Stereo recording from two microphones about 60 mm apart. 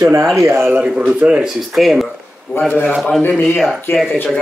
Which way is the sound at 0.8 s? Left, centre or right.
Centre.